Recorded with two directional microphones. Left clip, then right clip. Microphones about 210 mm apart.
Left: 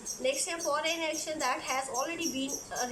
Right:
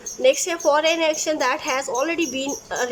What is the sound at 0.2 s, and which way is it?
A woman's voice, 55° right (ahead or behind).